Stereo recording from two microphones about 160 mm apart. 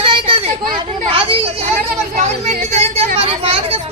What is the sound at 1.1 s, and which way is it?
Children playing, 35° right (ahead or behind).